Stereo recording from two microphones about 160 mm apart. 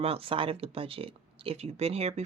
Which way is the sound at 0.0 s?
35° right (ahead or behind).